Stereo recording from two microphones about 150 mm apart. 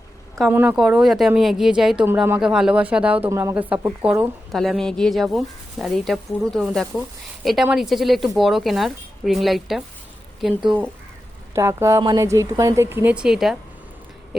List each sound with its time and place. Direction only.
0.5 s a woman's voice: 10° right (ahead or behind)
3.2 s a woman's voice: 20° right (ahead or behind); by 9.8 s centre (ahead or behind)
11.5 s speech: 20° right (ahead or behind); by 13.6 s 5° right (ahead or behind)